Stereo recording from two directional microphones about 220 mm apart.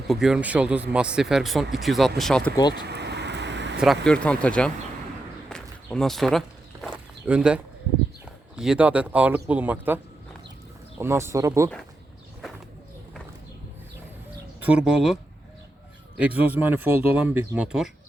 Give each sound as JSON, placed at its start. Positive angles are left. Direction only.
{"t": 0.1, "sound": "speech", "side_deg": -5}
{"t": 2.7, "sound": "vehicle", "side_deg": -50}
{"t": 3.8, "sound": "speech", "side_deg": 0}
{"t": 5.5, "sound": "a sound", "side_deg": 5}
{"t": 8.2, "sound": "speech", "side_deg": -5}
{"t": 11.0, "sound": "speech", "side_deg": -10}
{"t": 14.6, "sound": "speech", "side_deg": -5}